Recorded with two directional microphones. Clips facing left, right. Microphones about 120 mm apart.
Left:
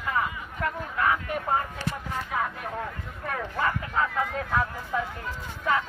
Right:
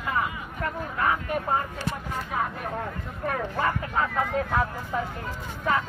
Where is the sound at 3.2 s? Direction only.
30° right (ahead or behind).